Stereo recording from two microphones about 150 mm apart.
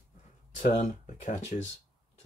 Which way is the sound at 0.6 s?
45° left (ahead or behind).